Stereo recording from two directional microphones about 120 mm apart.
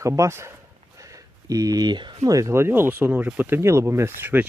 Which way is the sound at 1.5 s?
30° right (ahead or behind).